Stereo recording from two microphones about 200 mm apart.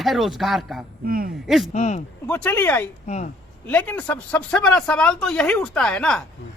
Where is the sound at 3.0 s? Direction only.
35° left (ahead or behind).